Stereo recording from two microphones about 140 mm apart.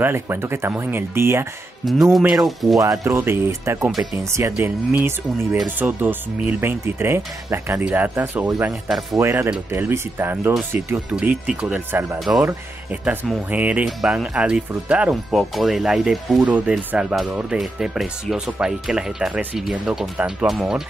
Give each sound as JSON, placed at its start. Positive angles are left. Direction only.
{"t": 0.0, "sound": "speech", "side_deg": -15}
{"t": 2.1, "sound": "speech", "side_deg": 0}
{"t": 2.8, "sound": "speech", "side_deg": -20}